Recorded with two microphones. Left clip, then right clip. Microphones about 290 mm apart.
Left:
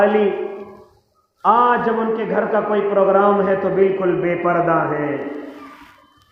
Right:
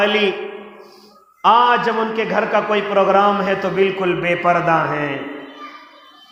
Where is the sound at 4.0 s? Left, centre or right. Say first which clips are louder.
Right 1 dB; right.